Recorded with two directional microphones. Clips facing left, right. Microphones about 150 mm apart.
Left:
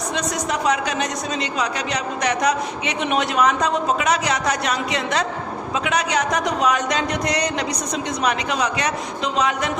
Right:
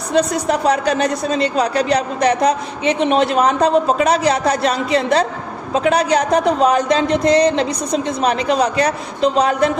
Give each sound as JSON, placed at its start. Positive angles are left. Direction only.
{"t": 0.1, "sound": "a woman's voice", "side_deg": -35}